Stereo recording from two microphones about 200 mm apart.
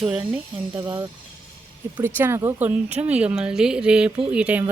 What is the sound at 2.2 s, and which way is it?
Speech, 10° right (ahead or behind).